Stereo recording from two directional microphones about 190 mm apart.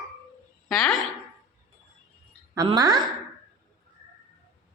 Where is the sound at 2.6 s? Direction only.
20° right (ahead or behind).